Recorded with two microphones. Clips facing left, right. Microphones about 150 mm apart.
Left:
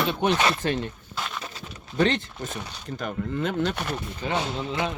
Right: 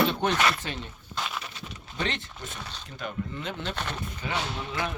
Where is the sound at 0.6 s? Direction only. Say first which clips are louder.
Left 10 dB; 50° left (ahead or behind).